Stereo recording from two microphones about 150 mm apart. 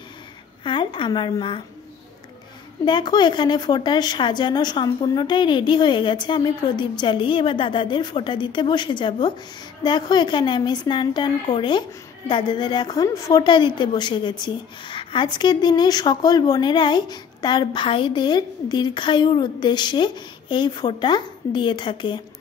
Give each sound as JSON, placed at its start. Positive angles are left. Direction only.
{"t": 0.7, "sound": "a woman's voice", "side_deg": 35}
{"t": 2.8, "sound": "a woman's voice", "side_deg": 30}